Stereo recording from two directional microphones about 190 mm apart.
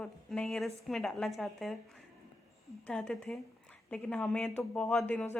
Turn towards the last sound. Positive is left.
turn(degrees=5)  # may be behind; listen again after turning